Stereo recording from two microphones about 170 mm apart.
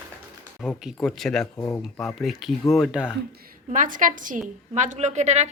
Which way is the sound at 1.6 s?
15° left (ahead or behind).